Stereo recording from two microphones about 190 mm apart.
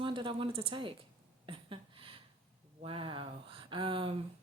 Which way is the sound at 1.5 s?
25° right (ahead or behind).